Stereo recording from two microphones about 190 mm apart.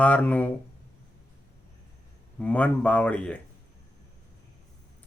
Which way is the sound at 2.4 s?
5° left (ahead or behind).